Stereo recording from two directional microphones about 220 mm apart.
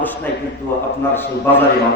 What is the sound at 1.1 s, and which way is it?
Speech, 10° left (ahead or behind).